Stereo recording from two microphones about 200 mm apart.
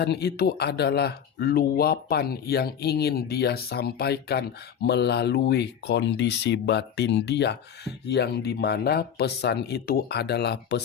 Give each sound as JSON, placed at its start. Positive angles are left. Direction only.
{"t": 0.0, "sound": "speech", "side_deg": 55}